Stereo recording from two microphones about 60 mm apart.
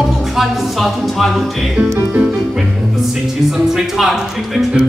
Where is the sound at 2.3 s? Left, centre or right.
Centre.